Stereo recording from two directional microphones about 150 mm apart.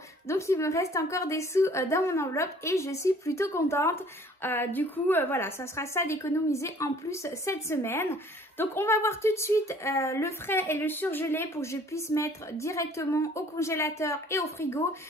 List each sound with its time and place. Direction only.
0.3 s a woman's voice: 20° left (ahead or behind)